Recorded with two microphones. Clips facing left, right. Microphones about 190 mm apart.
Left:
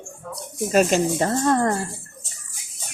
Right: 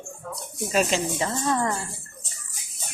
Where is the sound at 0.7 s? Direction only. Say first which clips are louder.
Left 6 dB; 50° left (ahead or behind).